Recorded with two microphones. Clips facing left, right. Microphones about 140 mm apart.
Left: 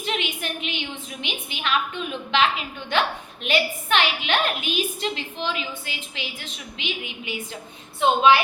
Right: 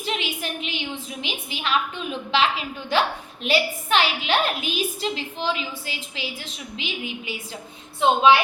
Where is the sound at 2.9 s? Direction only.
35° right (ahead or behind).